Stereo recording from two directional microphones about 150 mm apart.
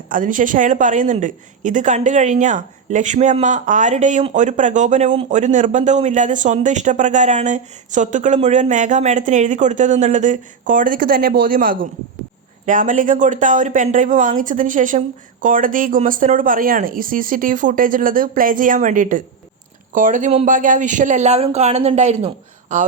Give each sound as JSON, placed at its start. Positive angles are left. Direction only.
{"t": 0.1, "sound": "speech", "side_deg": -65}
{"t": 12.6, "sound": "speech", "side_deg": -60}